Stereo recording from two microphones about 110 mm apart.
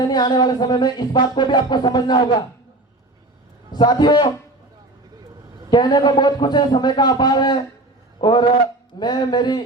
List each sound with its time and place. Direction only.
0.0 s music: 40° left (ahead or behind)
3.7 s a man's voice: 40° left (ahead or behind)
5.7 s music: 40° left (ahead or behind)